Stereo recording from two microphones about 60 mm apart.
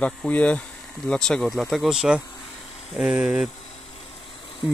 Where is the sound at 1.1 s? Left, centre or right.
Centre.